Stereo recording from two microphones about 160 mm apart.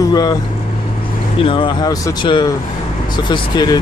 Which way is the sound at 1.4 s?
30° left (ahead or behind).